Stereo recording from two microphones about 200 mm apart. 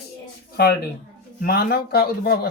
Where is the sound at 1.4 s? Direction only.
50° left (ahead or behind).